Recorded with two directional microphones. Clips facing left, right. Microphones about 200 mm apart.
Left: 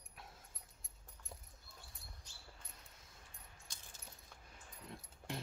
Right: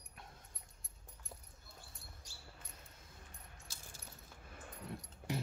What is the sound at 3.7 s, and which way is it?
Keys jangling, 5° right (ahead or behind).